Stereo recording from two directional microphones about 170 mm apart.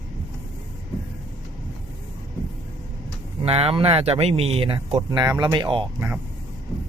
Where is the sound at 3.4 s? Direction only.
35° right (ahead or behind).